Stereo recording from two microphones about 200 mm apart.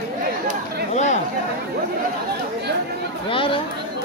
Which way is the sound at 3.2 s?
25° left (ahead or behind).